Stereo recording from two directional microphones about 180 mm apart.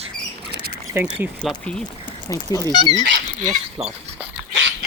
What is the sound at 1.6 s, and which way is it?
Speech, 5° left (ahead or behind).